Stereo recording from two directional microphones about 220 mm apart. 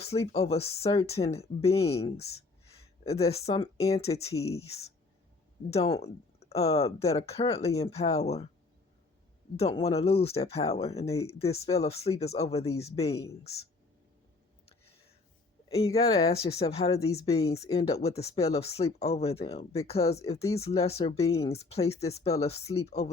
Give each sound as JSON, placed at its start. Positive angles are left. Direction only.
{"t": 0.0, "sound": "speech", "side_deg": 30}
{"t": 3.2, "sound": "speech", "side_deg": 30}
{"t": 5.7, "sound": "speech", "side_deg": 25}
{"t": 9.6, "sound": "speech", "side_deg": 25}
{"t": 13.4, "sound": "speech", "side_deg": 45}
{"t": 15.7, "sound": "speech", "side_deg": 25}